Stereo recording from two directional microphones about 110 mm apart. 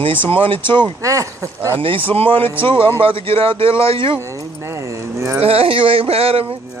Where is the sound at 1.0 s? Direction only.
30° right (ahead or behind).